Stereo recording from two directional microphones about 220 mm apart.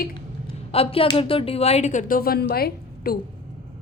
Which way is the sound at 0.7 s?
25° left (ahead or behind).